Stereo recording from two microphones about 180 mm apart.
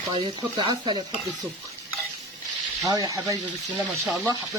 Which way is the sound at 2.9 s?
20° right (ahead or behind).